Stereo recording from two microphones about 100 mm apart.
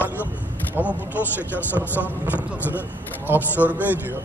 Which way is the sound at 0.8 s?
20° right (ahead or behind).